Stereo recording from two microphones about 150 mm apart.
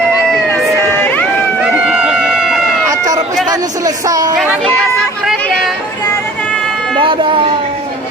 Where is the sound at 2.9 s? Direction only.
25° right (ahead or behind).